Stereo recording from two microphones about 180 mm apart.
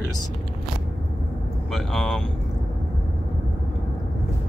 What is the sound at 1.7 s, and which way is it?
Speech, centre (ahead or behind).